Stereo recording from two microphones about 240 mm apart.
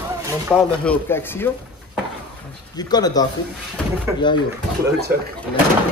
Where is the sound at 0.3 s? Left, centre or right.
Centre.